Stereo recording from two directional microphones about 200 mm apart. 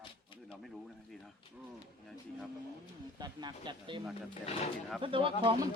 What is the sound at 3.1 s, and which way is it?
Speech, 20° right (ahead or behind).